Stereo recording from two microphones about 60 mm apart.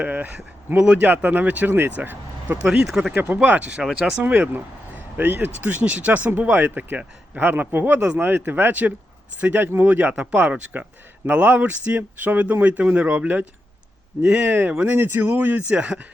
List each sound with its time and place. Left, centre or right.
0.0 s speech: right
0.7 s speech: right
1.0 s speech: right
1.7 s speech: right
2.8 s speech: centre
3.2 s speech: right
4.2 s speech: right